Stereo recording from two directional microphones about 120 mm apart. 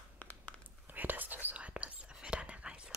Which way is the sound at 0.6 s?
15° right (ahead or behind).